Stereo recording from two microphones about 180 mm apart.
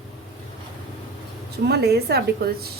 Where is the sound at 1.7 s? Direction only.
65° right (ahead or behind).